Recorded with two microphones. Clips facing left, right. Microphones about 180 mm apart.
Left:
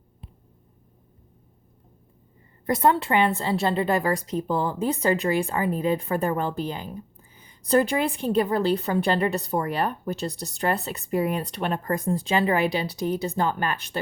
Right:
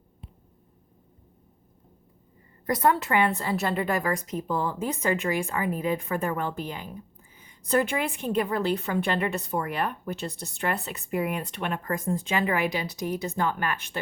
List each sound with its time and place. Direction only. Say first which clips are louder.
2.6 s a woman's voice: left 2 dB; 25° left (ahead or behind)